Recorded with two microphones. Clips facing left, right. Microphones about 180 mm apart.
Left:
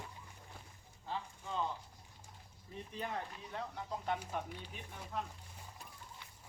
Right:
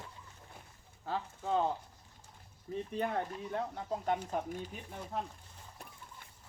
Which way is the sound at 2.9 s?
55° right (ahead or behind).